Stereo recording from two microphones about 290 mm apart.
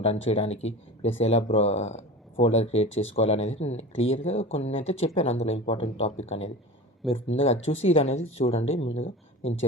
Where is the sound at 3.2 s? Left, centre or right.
Left.